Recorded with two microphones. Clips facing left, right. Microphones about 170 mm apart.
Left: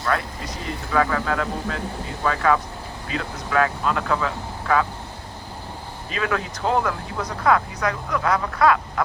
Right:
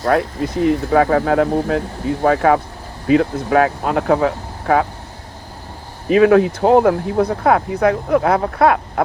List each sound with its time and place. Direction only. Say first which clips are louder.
0.1 s speech: right 9 dB; 55° right (ahead or behind)
6.1 s speech: right 15 dB; 55° right (ahead or behind)